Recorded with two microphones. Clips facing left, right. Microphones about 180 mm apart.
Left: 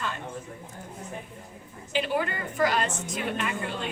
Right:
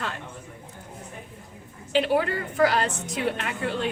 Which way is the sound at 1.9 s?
70° right (ahead or behind).